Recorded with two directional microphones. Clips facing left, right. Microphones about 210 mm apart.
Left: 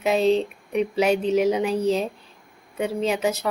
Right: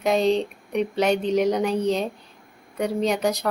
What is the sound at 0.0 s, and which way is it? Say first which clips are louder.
A woman's voice: left 1 dB; 5° left (ahead or behind).